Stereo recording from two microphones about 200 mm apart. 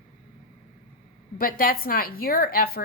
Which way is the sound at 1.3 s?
45° left (ahead or behind).